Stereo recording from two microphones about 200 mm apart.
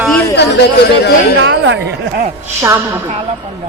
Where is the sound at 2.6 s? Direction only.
10° right (ahead or behind).